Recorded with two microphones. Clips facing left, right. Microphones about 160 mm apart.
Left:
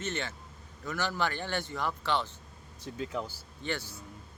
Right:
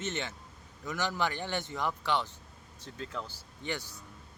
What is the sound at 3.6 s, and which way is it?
Speech, 15° right (ahead or behind).